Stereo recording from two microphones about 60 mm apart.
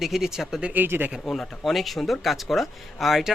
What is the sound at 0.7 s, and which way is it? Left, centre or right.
Speech, right.